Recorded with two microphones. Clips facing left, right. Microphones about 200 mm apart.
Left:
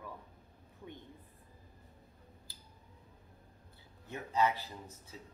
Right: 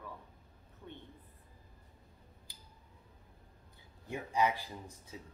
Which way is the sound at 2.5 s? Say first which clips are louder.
Even; 15° right (ahead or behind).